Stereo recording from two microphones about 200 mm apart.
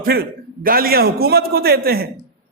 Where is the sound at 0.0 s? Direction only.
50° right (ahead or behind).